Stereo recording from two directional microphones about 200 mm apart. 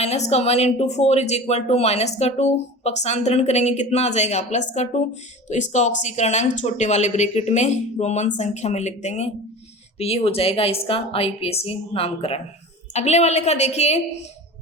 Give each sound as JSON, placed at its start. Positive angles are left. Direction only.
{"t": 0.0, "sound": "a woman's voice", "side_deg": 30}